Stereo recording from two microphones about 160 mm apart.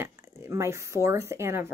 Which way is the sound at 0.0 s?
15° right (ahead or behind).